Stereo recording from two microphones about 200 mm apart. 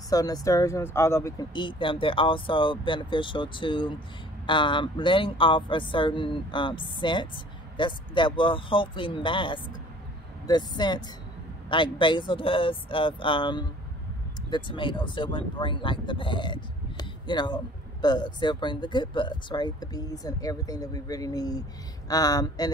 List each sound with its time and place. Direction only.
0.1 s speech: 20° left (ahead or behind)